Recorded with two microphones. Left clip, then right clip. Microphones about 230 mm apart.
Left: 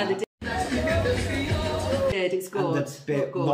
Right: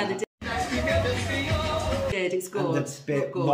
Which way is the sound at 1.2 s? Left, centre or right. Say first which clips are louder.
Right 1 dB; centre.